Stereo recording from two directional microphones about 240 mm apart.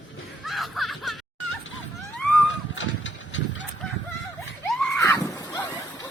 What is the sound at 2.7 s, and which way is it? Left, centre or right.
Engine, left.